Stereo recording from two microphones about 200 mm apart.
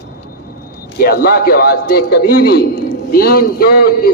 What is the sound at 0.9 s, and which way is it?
A man's voice, 50° left (ahead or behind).